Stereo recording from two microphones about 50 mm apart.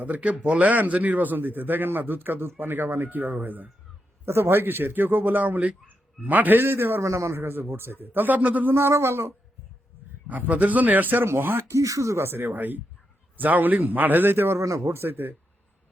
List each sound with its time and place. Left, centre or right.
0.0 s a man's voice: right
4.3 s a man's voice: right
7.0 s speech: right
7.3 s a man's voice: right
8.7 s speech: right
10.2 s a man's voice: right
11.7 s speech: right
12.2 s a man's voice: right
14.6 s speech: right
14.9 s a man's voice: right